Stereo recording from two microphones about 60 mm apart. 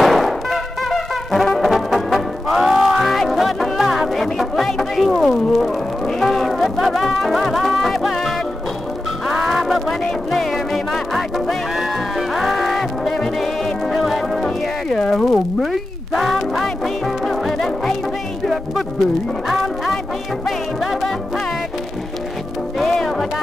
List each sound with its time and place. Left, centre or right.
0.0 s brass instrument: centre
5.3 s music: centre
19.4 s music: centre
22.8 s music: centre